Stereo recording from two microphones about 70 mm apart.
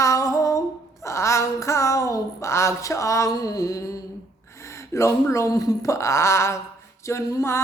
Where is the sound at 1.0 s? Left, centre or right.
Left.